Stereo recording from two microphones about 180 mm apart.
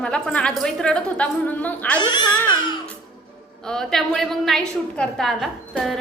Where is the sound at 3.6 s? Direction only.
5° left (ahead or behind).